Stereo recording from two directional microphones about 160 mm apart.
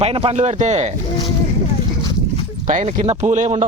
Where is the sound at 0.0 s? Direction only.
40° right (ahead or behind).